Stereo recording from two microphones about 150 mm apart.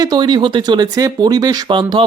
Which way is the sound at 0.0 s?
25° right (ahead or behind).